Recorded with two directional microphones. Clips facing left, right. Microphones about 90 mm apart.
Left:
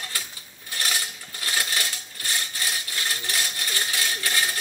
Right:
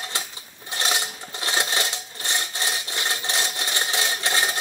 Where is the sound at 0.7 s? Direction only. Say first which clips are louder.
Right 3 dB; 25° right (ahead or behind).